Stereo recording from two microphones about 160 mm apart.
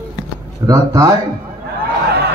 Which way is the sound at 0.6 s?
20° right (ahead or behind).